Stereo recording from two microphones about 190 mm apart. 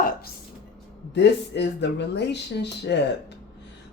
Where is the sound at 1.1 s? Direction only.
65° left (ahead or behind).